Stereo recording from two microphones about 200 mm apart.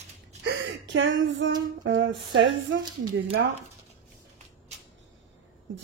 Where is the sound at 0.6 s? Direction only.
65° right (ahead or behind).